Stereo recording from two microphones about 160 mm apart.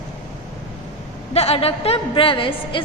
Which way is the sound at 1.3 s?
40° left (ahead or behind).